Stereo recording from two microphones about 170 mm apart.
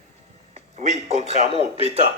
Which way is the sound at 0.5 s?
40° right (ahead or behind).